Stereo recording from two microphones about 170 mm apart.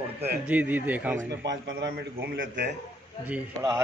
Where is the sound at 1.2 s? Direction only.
90° right.